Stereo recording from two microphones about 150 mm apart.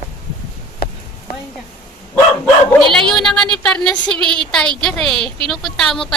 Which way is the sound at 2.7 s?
5° left (ahead or behind).